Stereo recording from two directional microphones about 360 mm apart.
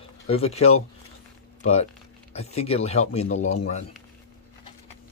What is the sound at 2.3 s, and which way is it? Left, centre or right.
Speech, centre.